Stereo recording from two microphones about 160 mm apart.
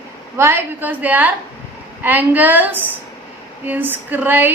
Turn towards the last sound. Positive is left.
turn(degrees=-10)  # may be behind; listen again after turning